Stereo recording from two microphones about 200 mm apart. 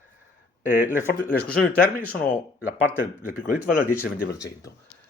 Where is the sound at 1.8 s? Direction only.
45° left (ahead or behind).